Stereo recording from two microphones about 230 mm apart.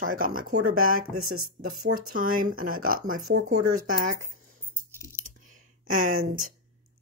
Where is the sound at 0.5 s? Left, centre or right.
Right.